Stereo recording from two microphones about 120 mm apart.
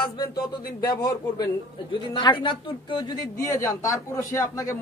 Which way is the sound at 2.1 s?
45° left (ahead or behind).